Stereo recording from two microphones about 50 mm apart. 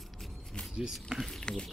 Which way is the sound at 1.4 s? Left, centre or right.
Centre.